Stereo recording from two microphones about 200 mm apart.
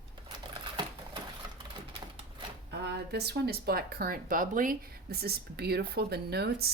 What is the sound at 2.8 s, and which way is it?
Speech, 55° right (ahead or behind).